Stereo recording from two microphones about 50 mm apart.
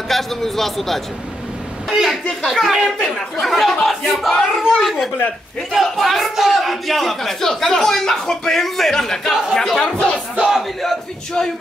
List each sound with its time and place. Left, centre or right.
0.1 s a man's voice: centre
2.8 s speech: centre
3.3 s a man's voice: centre
9.9 s battle cry: left
10.8 s speech: centre